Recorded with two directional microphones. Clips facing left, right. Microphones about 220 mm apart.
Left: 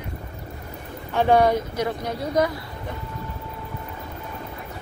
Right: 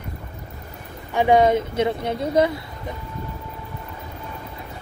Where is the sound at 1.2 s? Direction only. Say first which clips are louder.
Right 2 dB; 20° right (ahead or behind).